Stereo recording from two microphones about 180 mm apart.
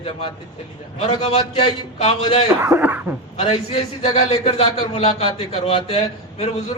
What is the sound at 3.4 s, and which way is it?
Speech, 35° left (ahead or behind).